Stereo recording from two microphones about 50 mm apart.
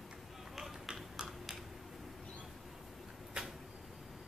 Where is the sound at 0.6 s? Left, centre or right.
Centre.